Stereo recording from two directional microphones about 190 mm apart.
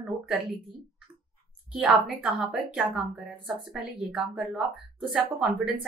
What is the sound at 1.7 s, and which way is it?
A woman's voice, centre (ahead or behind).